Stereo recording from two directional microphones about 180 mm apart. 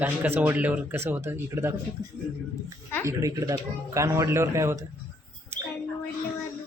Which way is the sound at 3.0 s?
20° right (ahead or behind).